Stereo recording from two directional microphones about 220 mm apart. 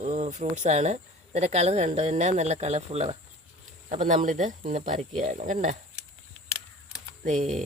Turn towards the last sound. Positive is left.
turn(degrees=-35)  # may be behind; listen again after turning